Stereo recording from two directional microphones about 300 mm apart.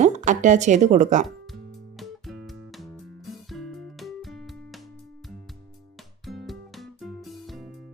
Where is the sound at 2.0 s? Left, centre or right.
Centre.